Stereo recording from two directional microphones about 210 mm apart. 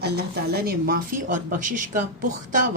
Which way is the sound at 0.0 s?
50° right (ahead or behind).